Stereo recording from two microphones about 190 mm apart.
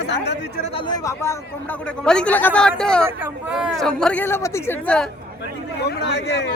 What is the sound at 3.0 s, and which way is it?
Speech, 5° right (ahead or behind).